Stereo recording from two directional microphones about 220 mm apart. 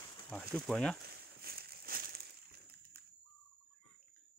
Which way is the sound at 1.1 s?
45° right (ahead or behind).